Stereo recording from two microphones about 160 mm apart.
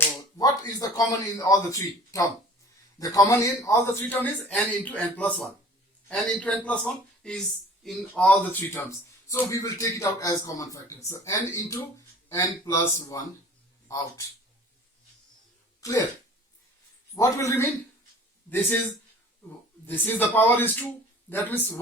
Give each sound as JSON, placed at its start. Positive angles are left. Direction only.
{"t": 0.3, "sound": "a man's voice", "side_deg": 25}
{"t": 15.8, "sound": "speech", "side_deg": 20}
{"t": 17.2, "sound": "a man's voice", "side_deg": 20}
{"t": 19.8, "sound": "a man's voice", "side_deg": 10}